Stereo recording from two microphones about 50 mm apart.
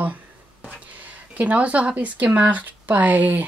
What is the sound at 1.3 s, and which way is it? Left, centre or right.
Speech, right.